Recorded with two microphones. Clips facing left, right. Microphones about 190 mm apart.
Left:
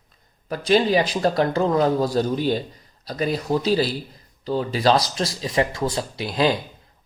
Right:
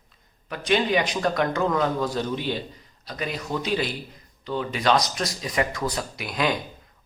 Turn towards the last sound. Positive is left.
turn(degrees=30)  # may be behind; listen again after turning